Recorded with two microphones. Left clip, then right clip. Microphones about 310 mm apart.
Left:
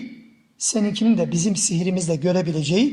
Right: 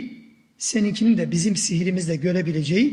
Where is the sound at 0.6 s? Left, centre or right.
Centre.